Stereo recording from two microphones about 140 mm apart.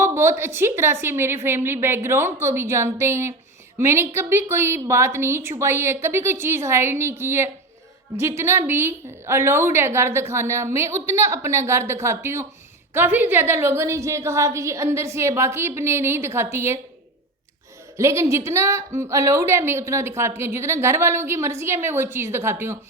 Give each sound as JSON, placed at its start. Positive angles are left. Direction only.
{"t": 0.0, "sound": "a woman's voice", "side_deg": -20}
{"t": 17.9, "sound": "a woman's voice", "side_deg": -20}